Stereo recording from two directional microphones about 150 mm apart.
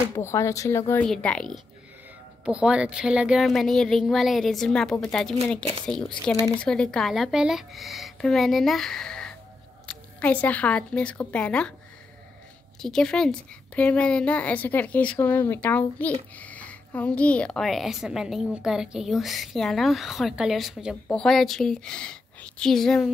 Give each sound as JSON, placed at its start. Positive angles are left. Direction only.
{"t": 0.2, "sound": "a woman's voice", "side_deg": 20}
{"t": 1.0, "sound": "a woman's voice", "side_deg": 5}
{"t": 2.4, "sound": "a woman's voice", "side_deg": -5}
{"t": 12.8, "sound": "a woman's voice", "side_deg": 5}